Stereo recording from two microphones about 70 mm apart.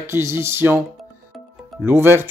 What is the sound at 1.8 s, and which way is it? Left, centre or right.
Speech, right.